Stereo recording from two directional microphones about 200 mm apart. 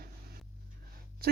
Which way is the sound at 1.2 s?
50° right (ahead or behind).